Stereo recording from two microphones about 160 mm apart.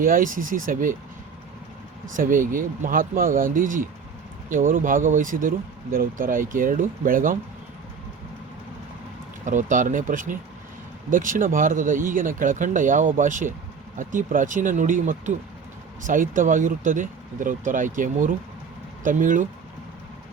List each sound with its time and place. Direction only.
0.0 s speech: 60° right (ahead or behind)
2.1 s speech: 55° right (ahead or behind)
9.4 s speech: 50° right (ahead or behind)